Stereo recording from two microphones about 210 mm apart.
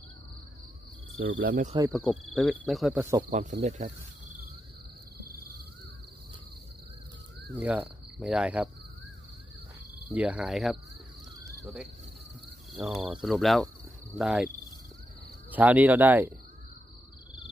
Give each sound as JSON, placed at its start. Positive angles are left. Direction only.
{"t": 1.4, "sound": "speech", "side_deg": -40}
{"t": 1.9, "sound": "speech", "side_deg": 0}
{"t": 3.3, "sound": "speech", "side_deg": -35}
{"t": 7.5, "sound": "speech", "side_deg": -5}
{"t": 10.1, "sound": "speech", "side_deg": -5}
{"t": 15.5, "sound": "speech", "side_deg": -5}